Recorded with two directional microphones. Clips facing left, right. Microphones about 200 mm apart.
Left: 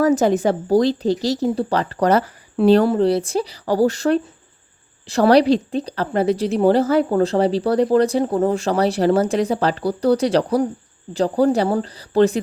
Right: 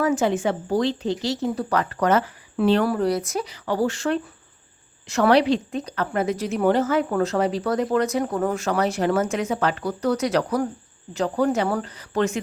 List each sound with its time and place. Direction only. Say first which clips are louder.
0.0 s a woman's voice: left 5 dB; 40° left (ahead or behind)
2.8 s a woman's voice: left 5 dB; 25° left (ahead or behind)